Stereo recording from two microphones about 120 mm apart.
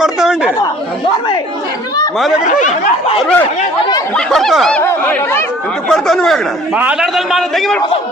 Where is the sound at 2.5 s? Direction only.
80° left.